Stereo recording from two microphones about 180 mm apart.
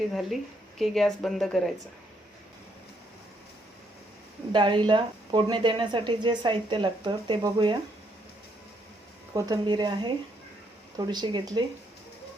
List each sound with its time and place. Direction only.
0.1 s speech: centre (ahead or behind)
4.5 s speech: 25° right (ahead or behind)
9.3 s speech: 20° right (ahead or behind)